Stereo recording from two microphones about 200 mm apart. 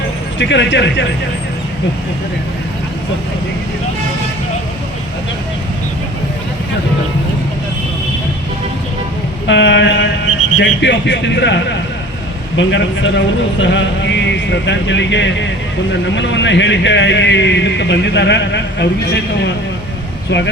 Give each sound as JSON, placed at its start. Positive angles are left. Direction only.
{"t": 0.3, "sound": "a man's voice", "side_deg": 60}
{"t": 9.5, "sound": "a man's voice", "side_deg": 60}